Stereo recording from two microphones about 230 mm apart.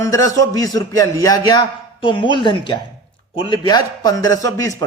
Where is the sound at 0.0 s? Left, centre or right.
Centre.